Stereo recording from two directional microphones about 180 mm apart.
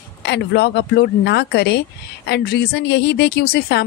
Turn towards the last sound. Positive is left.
turn(degrees=60)  # may be behind; listen again after turning